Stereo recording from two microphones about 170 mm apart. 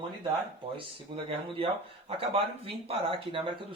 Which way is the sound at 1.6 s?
35° right (ahead or behind).